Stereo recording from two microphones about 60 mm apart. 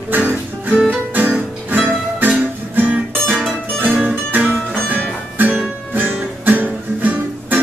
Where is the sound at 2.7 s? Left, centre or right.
Right.